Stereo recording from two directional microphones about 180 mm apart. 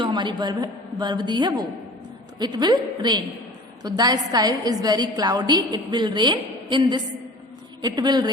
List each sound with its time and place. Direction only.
0.0 s a woman's voice: 25° right (ahead or behind)